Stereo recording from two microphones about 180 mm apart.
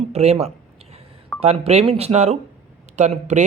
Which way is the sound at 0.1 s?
35° right (ahead or behind).